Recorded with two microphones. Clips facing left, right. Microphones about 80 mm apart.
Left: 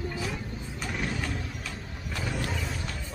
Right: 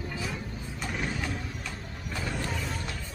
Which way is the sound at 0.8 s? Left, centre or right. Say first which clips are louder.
Even; centre.